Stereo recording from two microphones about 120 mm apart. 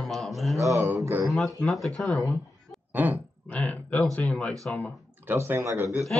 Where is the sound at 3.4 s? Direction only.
10° left (ahead or behind).